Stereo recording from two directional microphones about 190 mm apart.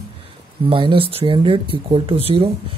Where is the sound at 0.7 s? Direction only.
30° right (ahead or behind).